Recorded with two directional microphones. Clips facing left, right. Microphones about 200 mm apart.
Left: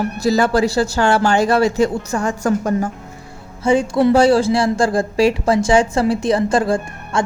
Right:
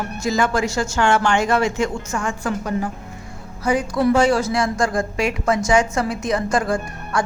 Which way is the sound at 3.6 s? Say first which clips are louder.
Left 4 dB; 25° left (ahead or behind).